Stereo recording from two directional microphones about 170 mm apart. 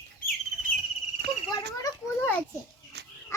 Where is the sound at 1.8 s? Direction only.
15° left (ahead or behind).